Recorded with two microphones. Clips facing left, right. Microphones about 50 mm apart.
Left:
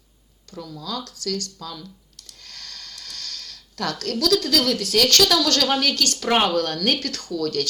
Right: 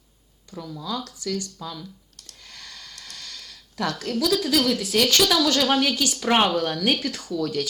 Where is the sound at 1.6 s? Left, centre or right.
Centre.